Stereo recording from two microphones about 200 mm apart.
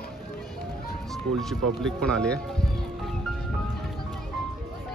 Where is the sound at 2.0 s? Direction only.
5° left (ahead or behind).